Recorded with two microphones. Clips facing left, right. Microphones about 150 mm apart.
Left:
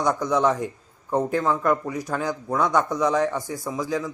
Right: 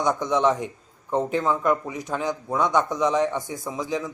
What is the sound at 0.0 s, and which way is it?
Speech, 20° right (ahead or behind).